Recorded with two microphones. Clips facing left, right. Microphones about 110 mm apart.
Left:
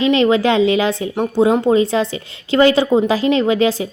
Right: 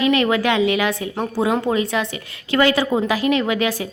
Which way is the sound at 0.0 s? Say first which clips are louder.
Left 4 dB; 25° left (ahead or behind).